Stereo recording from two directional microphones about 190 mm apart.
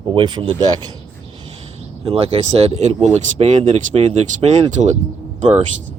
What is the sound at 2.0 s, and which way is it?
Speech, 30° right (ahead or behind).